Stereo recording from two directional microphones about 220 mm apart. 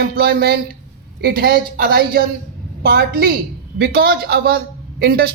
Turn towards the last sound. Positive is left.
turn(degrees=-45)  # may be behind; listen again after turning